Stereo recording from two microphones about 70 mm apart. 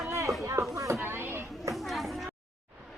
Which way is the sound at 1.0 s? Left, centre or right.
Right.